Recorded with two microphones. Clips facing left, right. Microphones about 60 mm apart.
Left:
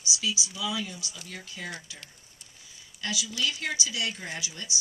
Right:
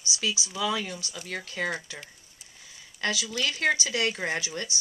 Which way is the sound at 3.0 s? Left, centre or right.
Right.